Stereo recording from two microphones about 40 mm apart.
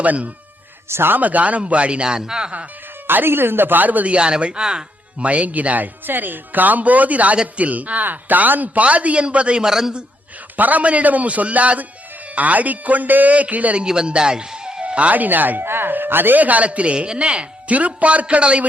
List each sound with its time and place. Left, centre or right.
0.0 s speech: right
0.9 s speech: right
1.1 s speech: right
2.0 s speech: centre
3.1 s speech: right
4.1 s speech: right
5.2 s speech: right
9.6 s speech: centre
10.6 s speech: right
13.7 s a man's voice: right
15.1 s speech: right
15.6 s speech: right